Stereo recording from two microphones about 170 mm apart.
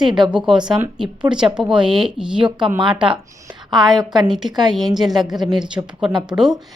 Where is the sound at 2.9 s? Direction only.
5° right (ahead or behind).